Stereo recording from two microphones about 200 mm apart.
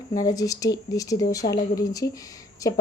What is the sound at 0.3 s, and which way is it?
Speech, 15° left (ahead or behind).